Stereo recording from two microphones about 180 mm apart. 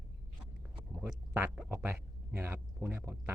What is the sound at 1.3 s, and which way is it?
A man's voice, 10° right (ahead or behind).